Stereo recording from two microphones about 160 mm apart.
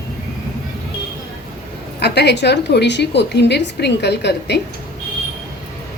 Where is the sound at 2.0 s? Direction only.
90° left.